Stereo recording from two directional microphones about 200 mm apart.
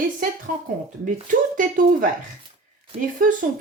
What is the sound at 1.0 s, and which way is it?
Speech, 40° right (ahead or behind).